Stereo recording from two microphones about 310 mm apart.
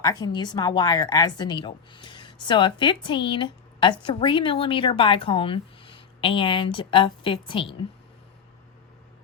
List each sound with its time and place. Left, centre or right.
0.0 s a woman's voice: centre